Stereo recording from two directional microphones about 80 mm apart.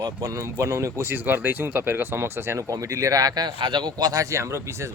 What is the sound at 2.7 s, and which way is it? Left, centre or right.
A man's voice, right.